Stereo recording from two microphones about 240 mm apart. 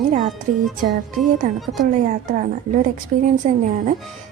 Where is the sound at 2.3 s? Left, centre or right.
Right.